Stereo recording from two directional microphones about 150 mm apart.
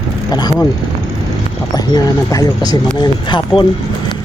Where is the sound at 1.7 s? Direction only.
25° left (ahead or behind).